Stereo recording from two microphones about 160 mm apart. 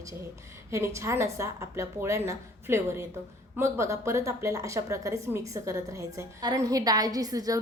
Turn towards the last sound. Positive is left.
turn(degrees=-25)  # may be behind; listen again after turning